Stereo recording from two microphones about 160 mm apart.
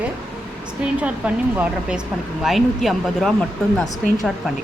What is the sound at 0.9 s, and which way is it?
A woman's voice, 10° right (ahead or behind).